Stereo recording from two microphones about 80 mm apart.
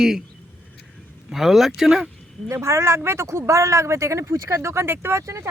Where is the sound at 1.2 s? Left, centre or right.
Centre.